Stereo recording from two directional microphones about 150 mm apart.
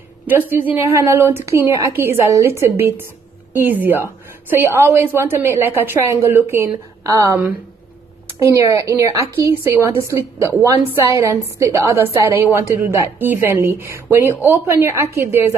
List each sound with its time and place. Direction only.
0.5 s a woman's voice: 15° right (ahead or behind)
8.5 s a woman's voice: 20° right (ahead or behind)